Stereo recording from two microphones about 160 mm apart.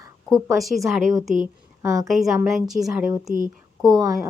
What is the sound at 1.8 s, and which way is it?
Speech, 20° right (ahead or behind).